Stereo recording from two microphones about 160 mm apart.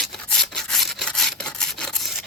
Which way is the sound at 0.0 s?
5° left (ahead or behind).